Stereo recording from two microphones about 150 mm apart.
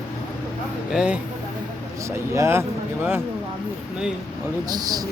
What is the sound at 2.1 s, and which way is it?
Speech, 20° right (ahead or behind).